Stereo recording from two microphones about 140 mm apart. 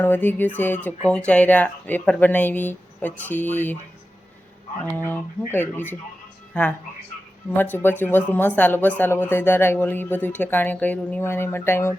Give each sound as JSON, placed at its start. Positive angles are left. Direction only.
{"t": 0.0, "sound": "speech", "side_deg": 15}
{"t": 5.5, "sound": "speech", "side_deg": 15}